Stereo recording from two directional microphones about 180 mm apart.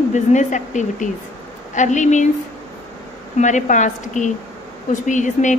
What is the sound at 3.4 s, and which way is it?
A woman's voice, 45° left (ahead or behind).